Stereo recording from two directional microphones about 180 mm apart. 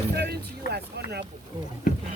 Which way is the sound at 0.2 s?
65° right (ahead or behind).